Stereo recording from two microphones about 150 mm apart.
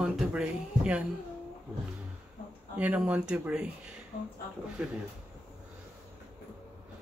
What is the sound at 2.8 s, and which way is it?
Speech, 10° right (ahead or behind).